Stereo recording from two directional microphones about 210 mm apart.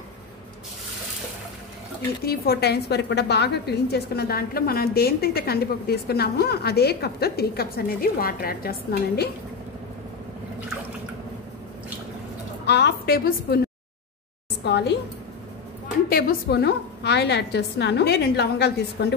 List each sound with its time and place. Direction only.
2.2 s a woman's voice: 50° left (ahead or behind)
12.6 s a woman's voice: 55° left (ahead or behind)
14.6 s a woman's voice: 55° left (ahead or behind)
16.1 s a woman's voice: 45° left (ahead or behind)